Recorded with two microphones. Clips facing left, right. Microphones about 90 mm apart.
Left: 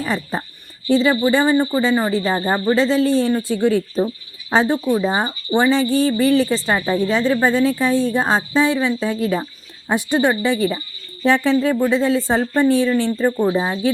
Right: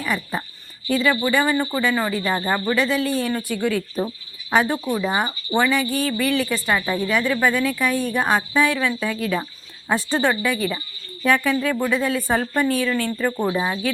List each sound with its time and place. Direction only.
0.0 s speech: 30° left (ahead or behind); by 10.3 s 15° left (ahead or behind)
10.4 s speech: 25° left (ahead or behind)